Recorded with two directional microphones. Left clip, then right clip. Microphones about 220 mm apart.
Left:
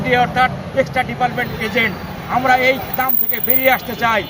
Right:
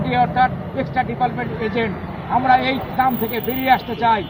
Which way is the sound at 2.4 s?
10° left (ahead or behind).